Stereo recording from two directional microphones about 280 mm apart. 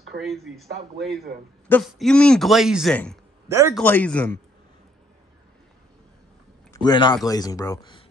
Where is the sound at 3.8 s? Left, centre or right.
Centre.